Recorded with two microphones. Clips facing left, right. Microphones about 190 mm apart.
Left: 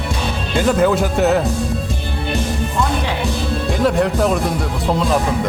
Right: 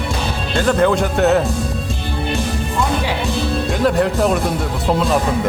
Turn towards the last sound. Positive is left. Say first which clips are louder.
# even
turn(degrees=0)  # may be behind; listen again after turning